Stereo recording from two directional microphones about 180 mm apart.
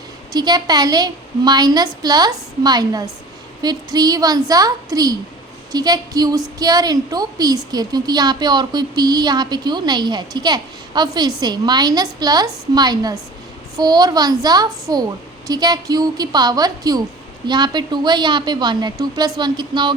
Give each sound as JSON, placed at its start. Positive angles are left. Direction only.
{"t": 0.3, "sound": "a woman's voice", "side_deg": -20}